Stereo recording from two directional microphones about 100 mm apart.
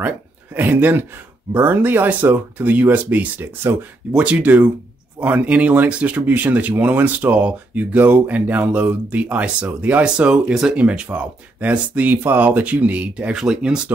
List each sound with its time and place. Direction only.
0.6 s speech: 20° right (ahead or behind)